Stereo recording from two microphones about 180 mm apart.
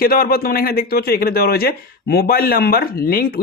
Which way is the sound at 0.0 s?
55° left (ahead or behind).